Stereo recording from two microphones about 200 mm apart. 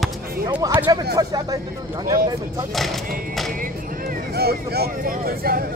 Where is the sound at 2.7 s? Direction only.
Centre (ahead or behind).